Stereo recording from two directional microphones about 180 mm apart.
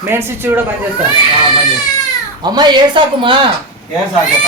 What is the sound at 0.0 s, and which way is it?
Speech, 10° right (ahead or behind).